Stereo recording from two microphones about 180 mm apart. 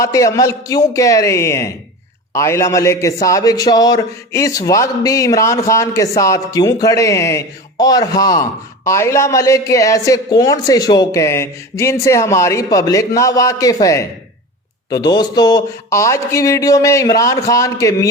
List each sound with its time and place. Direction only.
0.0 s a man's voice: 15° left (ahead or behind)